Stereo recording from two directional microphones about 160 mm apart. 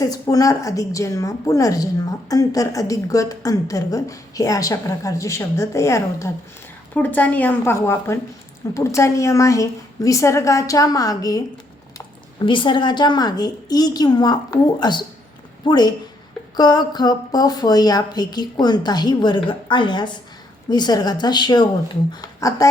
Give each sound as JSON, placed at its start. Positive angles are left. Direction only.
{"t": 0.0, "sound": "a woman's voice", "side_deg": 20}